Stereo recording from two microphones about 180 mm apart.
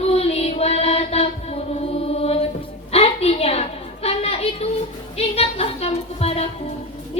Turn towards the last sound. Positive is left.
turn(degrees=35)  # may be behind; listen again after turning